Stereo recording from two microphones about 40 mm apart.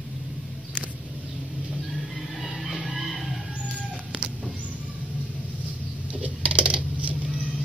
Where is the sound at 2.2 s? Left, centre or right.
Centre.